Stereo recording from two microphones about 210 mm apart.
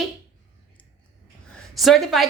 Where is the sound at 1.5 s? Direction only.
Centre (ahead or behind).